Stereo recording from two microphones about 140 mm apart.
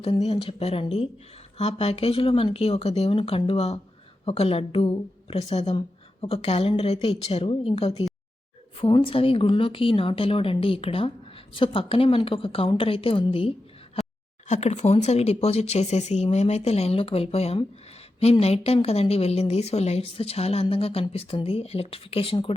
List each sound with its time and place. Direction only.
0.0 s a woman's voice: 45° left (ahead or behind)
14.4 s a woman's voice: 55° left (ahead or behind)